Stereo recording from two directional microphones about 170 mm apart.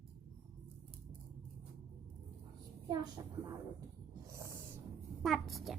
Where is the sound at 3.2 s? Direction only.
20° right (ahead or behind).